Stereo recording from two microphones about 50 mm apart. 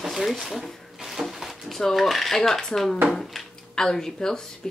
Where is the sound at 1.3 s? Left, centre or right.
Centre.